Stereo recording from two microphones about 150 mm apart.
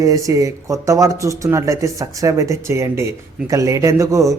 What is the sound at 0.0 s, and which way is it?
Speech, 20° right (ahead or behind).